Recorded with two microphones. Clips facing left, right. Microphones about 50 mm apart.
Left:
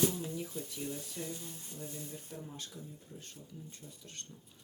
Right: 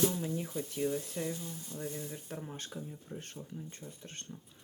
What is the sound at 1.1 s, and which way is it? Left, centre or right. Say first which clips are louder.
Speech: right 5 dB; right.